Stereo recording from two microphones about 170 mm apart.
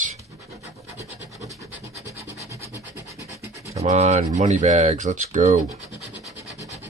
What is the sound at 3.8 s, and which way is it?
Speech, 40° right (ahead or behind).